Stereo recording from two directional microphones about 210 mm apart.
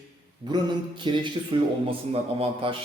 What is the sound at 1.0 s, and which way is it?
Speech, 20° right (ahead or behind).